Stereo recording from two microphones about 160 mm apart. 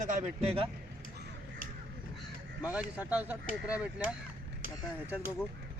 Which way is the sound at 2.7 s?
10° right (ahead or behind).